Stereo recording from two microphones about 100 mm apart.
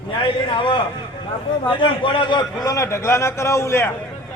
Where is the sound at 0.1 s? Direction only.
55° left (ahead or behind); by 2.8 s 40° left (ahead or behind).